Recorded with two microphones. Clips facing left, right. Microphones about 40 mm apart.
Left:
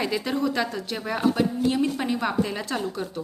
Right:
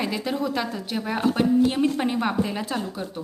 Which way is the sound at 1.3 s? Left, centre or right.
Right.